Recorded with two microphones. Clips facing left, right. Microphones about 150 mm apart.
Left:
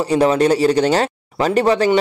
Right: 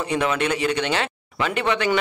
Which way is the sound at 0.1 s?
35° left (ahead or behind).